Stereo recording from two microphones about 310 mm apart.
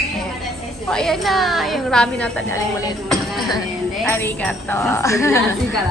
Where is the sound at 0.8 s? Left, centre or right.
Centre.